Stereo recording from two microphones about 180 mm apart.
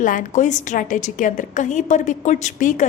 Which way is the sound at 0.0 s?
45° left (ahead or behind).